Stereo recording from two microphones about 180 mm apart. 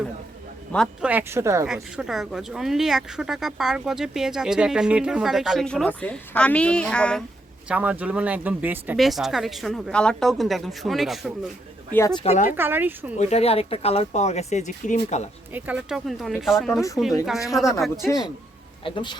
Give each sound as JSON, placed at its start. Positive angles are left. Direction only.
{"t": 1.0, "sound": "speech", "side_deg": -10}
{"t": 1.6, "sound": "speech", "side_deg": -5}
{"t": 7.7, "sound": "speech", "side_deg": -10}
{"t": 11.9, "sound": "speech", "side_deg": 20}
{"t": 12.2, "sound": "speech", "side_deg": 40}
{"t": 12.5, "sound": "speech", "side_deg": -10}
{"t": 13.1, "sound": "speech", "side_deg": 35}
{"t": 15.5, "sound": "speech", "side_deg": -10}
{"t": 17.5, "sound": "speech", "side_deg": 15}
{"t": 18.0, "sound": "speech", "side_deg": -5}
{"t": 18.8, "sound": "speech", "side_deg": 30}